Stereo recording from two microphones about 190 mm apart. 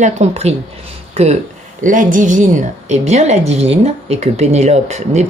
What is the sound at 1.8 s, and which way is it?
A woman's voice, 45° right (ahead or behind).